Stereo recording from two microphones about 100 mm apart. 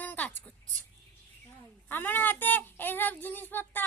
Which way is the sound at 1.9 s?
20° left (ahead or behind).